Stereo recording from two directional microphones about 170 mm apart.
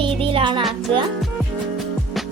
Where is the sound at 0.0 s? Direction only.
30° right (ahead or behind).